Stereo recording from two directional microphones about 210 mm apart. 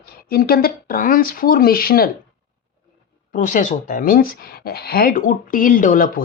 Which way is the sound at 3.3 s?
35° left (ahead or behind).